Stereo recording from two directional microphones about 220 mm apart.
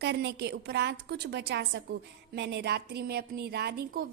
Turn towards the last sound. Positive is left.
turn(degrees=-45)  # may be behind; listen again after turning